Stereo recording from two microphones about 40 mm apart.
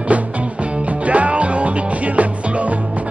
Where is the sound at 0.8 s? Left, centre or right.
Right.